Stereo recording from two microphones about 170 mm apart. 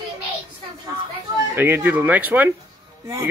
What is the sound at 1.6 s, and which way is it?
Speech, 15° right (ahead or behind).